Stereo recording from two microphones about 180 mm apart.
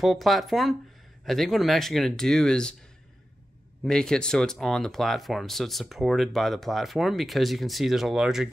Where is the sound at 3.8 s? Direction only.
5° left (ahead or behind).